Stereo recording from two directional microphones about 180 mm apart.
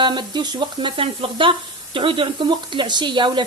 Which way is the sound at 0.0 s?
25° right (ahead or behind).